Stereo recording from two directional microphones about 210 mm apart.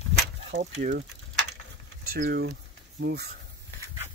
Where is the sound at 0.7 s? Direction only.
40° right (ahead or behind).